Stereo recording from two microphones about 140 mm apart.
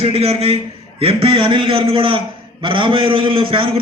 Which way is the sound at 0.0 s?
45° right (ahead or behind).